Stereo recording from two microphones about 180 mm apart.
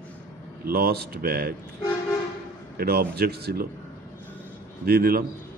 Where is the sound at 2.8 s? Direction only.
60° right (ahead or behind).